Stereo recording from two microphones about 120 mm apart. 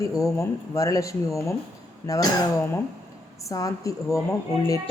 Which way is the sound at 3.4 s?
30° left (ahead or behind).